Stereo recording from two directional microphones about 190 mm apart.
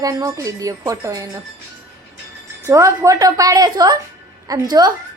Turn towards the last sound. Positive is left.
turn(degrees=-20)  # may be behind; listen again after turning